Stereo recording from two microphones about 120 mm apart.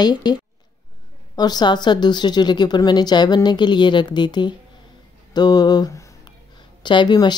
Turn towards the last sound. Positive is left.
turn(degrees=40)  # may be behind; listen again after turning